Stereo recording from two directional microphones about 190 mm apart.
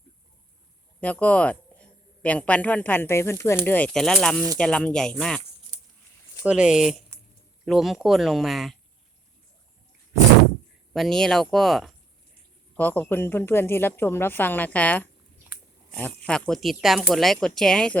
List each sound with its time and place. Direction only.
1.0 s a man's voice: 10° left (ahead or behind)
6.4 s speech: 5° right (ahead or behind)
10.9 s a man's voice: centre (ahead or behind)